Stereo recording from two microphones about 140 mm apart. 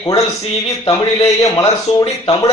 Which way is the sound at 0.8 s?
40° left (ahead or behind).